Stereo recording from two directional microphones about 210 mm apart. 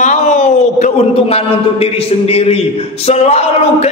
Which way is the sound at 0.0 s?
35° left (ahead or behind).